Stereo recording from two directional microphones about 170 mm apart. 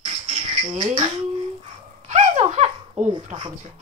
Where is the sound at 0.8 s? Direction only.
35° right (ahead or behind).